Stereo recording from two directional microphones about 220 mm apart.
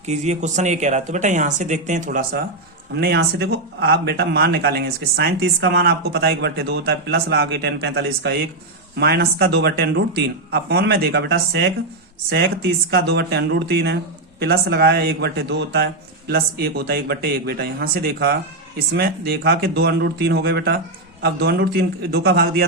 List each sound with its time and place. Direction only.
0.0 s speech: 30° right (ahead or behind); by 22.6 s 45° right (ahead or behind)